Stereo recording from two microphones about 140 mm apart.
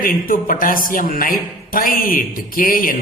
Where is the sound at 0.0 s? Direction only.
85° left.